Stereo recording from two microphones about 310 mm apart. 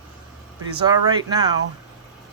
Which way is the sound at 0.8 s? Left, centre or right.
Centre.